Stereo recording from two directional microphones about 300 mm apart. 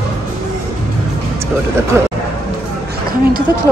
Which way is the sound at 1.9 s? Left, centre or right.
Centre.